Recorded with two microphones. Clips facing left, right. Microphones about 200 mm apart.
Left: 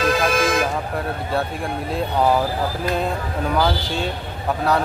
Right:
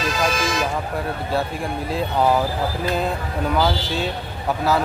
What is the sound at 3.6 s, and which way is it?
Speech, centre (ahead or behind).